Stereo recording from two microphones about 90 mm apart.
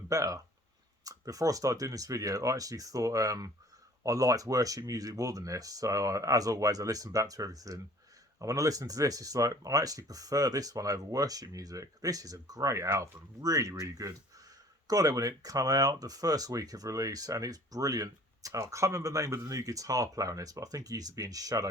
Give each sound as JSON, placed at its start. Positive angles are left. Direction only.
{"t": 0.1, "sound": "speech", "side_deg": -40}